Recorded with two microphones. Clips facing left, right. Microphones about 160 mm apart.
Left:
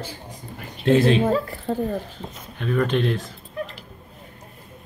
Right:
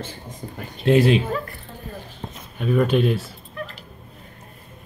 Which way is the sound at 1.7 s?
90° left.